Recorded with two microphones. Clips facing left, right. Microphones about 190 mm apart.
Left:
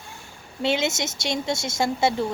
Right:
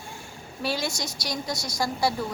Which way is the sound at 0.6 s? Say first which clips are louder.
Left 5 dB; 25° left (ahead or behind).